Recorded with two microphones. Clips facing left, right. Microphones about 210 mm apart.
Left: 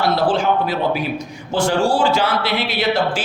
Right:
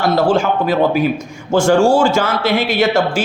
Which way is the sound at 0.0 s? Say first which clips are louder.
Right 3 dB; 45° right (ahead or behind).